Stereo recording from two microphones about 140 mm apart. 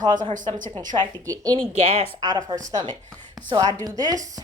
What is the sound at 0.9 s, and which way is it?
A woman's voice, 35° right (ahead or behind).